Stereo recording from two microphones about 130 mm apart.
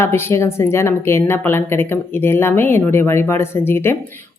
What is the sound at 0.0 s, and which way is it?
Speech, 20° left (ahead or behind).